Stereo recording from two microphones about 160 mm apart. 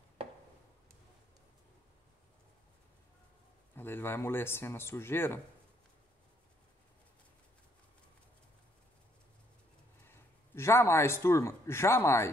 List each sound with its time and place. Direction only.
3.7 s speech: 15° left (ahead or behind)
10.0 s a man's voice: 15° left (ahead or behind)